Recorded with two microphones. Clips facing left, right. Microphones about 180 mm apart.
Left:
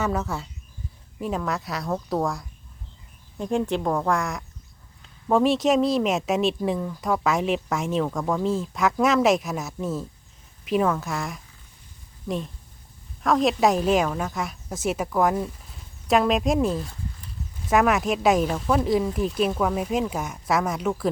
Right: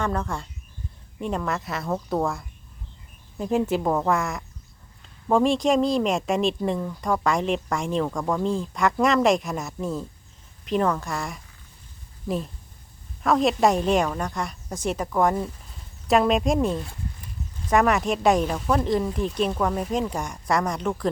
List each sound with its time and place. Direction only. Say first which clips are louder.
0.0 s speech: left 1 dB; 5° left (ahead or behind)
13.2 s speech: even; centre (ahead or behind)